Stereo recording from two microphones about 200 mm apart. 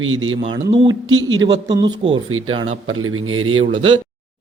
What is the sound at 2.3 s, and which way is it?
A man's voice, 90° right.